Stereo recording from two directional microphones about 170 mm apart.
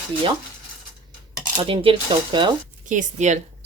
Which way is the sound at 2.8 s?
50° right (ahead or behind).